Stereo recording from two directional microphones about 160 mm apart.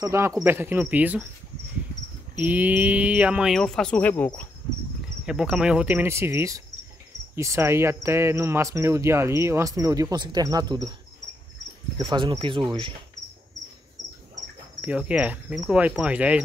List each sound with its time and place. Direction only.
0.0 s speech: 20° right (ahead or behind)
2.3 s speech: 10° right (ahead or behind); by 4.3 s 10° left (ahead or behind)
5.2 s speech: 5° right (ahead or behind); by 11.0 s 25° right (ahead or behind)
12.0 s speech: 30° right (ahead or behind)
14.8 s speech: 5° right (ahead or behind)